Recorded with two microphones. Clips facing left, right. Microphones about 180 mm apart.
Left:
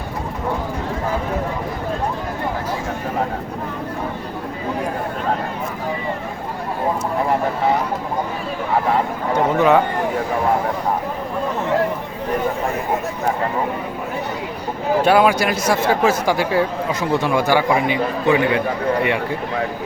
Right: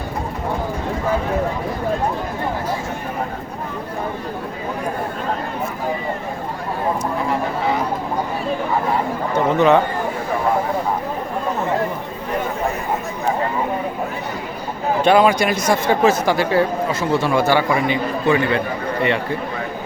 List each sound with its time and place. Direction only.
9.6 s speech: 5° left (ahead or behind)
15.0 s speech: 5° left (ahead or behind)